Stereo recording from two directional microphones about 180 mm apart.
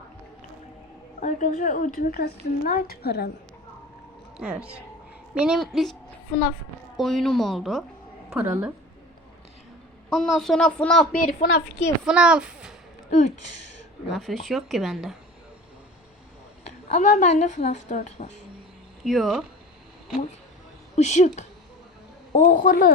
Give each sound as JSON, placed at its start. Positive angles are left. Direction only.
{"t": 1.2, "sound": "speech", "side_deg": 45}
{"t": 4.4, "sound": "a woman's voice", "side_deg": -5}
{"t": 8.3, "sound": "a woman's voice", "side_deg": -10}
{"t": 10.1, "sound": "a woman's voice", "side_deg": 0}
{"t": 11.3, "sound": "a woman's voice", "side_deg": 65}
{"t": 12.0, "sound": "a woman's voice", "side_deg": -5}
{"t": 13.1, "sound": "speech", "side_deg": 40}
{"t": 14.1, "sound": "a woman's voice", "side_deg": 0}
{"t": 16.6, "sound": "a woman's voice", "side_deg": 40}
{"t": 19.0, "sound": "a woman's voice", "side_deg": 0}
{"t": 20.9, "sound": "a woman's voice", "side_deg": 40}